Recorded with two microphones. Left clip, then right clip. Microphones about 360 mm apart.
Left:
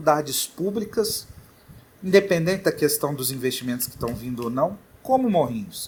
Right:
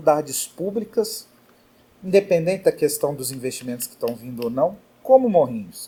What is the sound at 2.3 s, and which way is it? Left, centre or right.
Speech, left.